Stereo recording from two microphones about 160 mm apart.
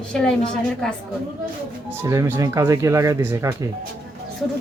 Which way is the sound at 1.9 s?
20° right (ahead or behind).